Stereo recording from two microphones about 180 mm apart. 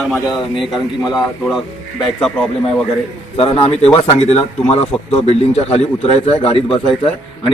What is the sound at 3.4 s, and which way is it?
A man's voice, 35° left (ahead or behind).